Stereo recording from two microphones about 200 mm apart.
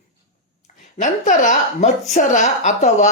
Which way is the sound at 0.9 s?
40° left (ahead or behind).